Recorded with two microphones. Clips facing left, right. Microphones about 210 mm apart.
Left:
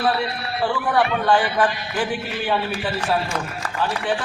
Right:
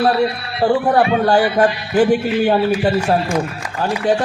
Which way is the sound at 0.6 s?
40° right (ahead or behind).